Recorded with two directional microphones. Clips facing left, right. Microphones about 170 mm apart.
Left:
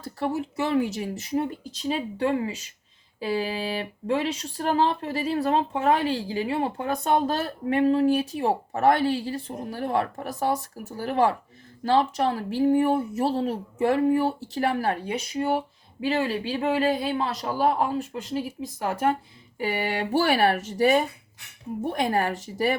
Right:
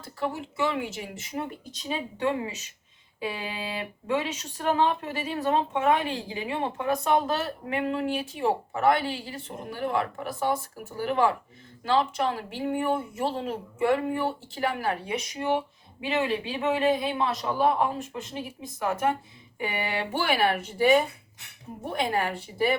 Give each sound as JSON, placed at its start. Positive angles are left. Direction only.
{"t": 0.2, "sound": "speech", "side_deg": 40}
{"t": 19.5, "sound": "speech", "side_deg": 35}